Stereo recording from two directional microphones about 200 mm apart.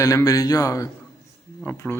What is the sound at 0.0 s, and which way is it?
A man's voice, 15° left (ahead or behind).